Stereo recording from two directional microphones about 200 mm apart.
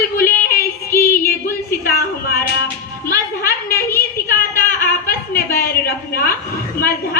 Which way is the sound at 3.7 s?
10° left (ahead or behind).